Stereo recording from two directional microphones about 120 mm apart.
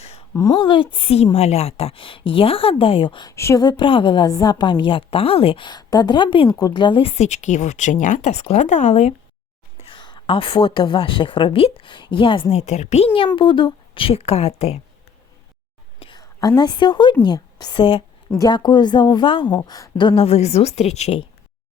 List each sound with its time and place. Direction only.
0.0 s a sound: 60° left (ahead or behind)
0.6 s a woman's voice: 40° left (ahead or behind)
3.2 s speech: 25° left (ahead or behind)
3.6 s a woman's voice: 40° left (ahead or behind)
4.3 s a woman's voice: 35° left (ahead or behind)
7.1 s speech: 75° left (ahead or behind)
9.8 s a woman's voice: 40° left (ahead or behind)
12.5 s speech: 70° left (ahead or behind)
13.1 s a woman's voice: 45° left (ahead or behind)
16.0 s whispering: 45° left (ahead or behind)
16.4 s a woman's voice: 35° left (ahead or behind)
18.3 s a woman's voice: 35° left (ahead or behind); by 21.2 s 60° left (ahead or behind)